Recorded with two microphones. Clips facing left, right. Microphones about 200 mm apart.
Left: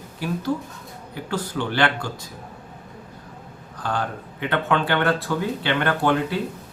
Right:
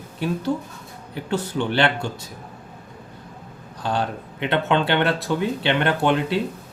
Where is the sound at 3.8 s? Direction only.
20° right (ahead or behind).